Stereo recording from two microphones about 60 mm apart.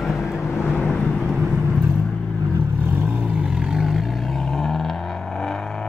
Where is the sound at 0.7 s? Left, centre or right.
Centre.